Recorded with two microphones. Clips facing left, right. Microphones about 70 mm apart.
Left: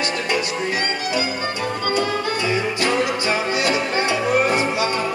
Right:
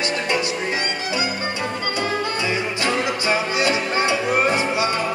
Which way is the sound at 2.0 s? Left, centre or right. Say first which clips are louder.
Even; right.